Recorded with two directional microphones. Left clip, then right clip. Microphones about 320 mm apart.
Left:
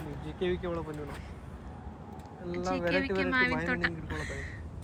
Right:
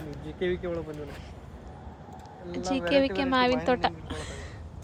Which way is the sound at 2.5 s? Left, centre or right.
Centre.